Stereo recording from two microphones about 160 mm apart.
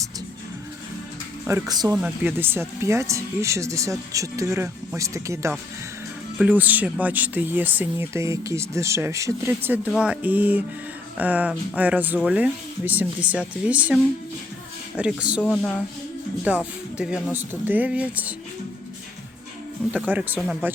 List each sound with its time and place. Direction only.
1.5 s speech: 20° right (ahead or behind)
2.0 s speech: 10° right (ahead or behind)
15.4 s speech: 5° left (ahead or behind)
16.4 s speech: 10° right (ahead or behind)
19.9 s speech: 10° right (ahead or behind)